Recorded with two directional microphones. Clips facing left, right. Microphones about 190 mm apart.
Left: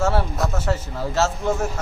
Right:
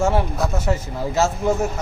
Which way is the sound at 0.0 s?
15° right (ahead or behind).